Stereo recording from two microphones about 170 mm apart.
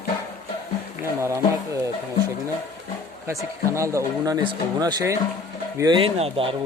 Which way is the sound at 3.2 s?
15° right (ahead or behind).